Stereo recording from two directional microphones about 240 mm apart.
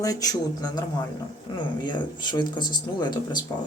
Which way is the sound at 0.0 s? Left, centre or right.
Centre.